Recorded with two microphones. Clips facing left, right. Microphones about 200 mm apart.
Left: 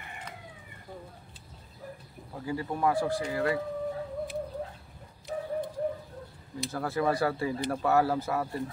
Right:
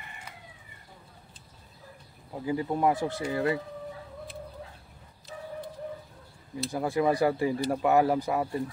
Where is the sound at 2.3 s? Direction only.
20° right (ahead or behind).